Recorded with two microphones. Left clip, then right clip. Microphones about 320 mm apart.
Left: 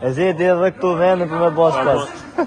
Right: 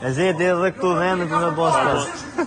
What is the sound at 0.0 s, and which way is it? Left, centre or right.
A man's voice, centre.